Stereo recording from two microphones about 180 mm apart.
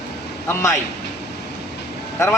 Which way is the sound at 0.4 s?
15° left (ahead or behind).